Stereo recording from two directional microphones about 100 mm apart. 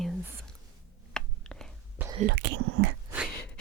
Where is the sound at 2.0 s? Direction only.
15° right (ahead or behind).